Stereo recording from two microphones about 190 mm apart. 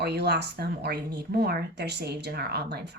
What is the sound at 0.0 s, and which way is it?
Speech, 60° right (ahead or behind).